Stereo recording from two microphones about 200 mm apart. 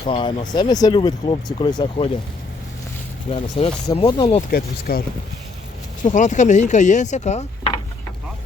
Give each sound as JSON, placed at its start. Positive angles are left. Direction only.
{"t": 0.0, "sound": "speech", "side_deg": 25}
{"t": 3.3, "sound": "speech", "side_deg": 30}
{"t": 4.4, "sound": "speech", "side_deg": 50}